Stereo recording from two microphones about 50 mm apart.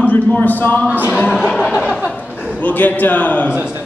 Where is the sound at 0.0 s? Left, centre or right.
Left.